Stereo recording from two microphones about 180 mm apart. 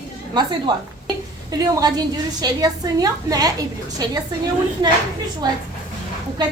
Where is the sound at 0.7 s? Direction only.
25° right (ahead or behind).